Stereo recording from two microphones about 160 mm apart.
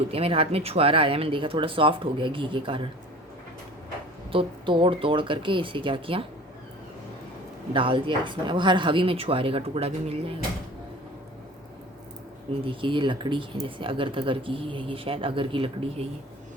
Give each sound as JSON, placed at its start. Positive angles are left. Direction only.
{"t": 0.1, "sound": "speech", "side_deg": -35}
{"t": 4.3, "sound": "speech", "side_deg": -35}
{"t": 7.7, "sound": "speech", "side_deg": -30}
{"t": 12.6, "sound": "speech", "side_deg": -30}